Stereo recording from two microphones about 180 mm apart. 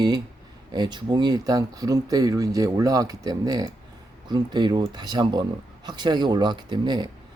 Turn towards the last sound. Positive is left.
turn(degrees=-25)  # may be behind; listen again after turning